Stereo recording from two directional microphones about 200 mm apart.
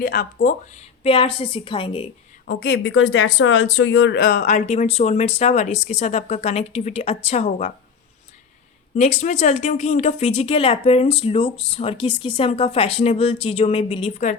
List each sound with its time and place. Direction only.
0.0 s speech: 50° left (ahead or behind); by 2.0 s 25° left (ahead or behind)
2.5 s speech: 60° left (ahead or behind)
4.2 s speech: 40° left (ahead or behind)
9.0 s speech: 35° left (ahead or behind)